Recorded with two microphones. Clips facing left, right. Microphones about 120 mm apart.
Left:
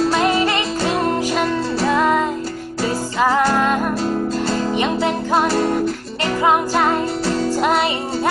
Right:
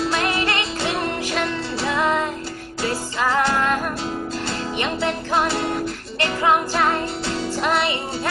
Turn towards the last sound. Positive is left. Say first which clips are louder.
# left 3 dB
turn(degrees=15)  # may be behind; listen again after turning